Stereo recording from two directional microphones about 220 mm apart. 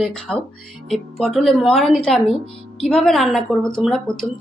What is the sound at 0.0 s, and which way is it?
Speech, 5° left (ahead or behind).